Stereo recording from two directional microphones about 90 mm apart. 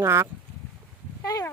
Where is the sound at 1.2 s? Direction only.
45° left (ahead or behind).